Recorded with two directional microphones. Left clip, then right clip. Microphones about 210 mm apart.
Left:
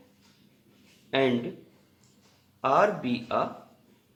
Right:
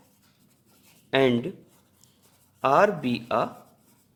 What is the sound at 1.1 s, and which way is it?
Speech, 50° right (ahead or behind).